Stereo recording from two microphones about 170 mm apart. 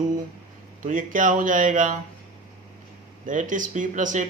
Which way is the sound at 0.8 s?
50° right (ahead or behind).